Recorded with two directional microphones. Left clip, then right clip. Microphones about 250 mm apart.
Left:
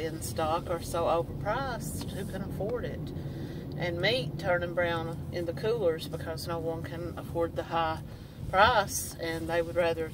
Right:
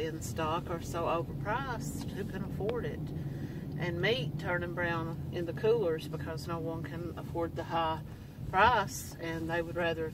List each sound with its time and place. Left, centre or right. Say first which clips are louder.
0.0 s speech: left 3 dB; centre
3.8 s speech: left 3 dB; centre
7.3 s speech: left 4 dB; centre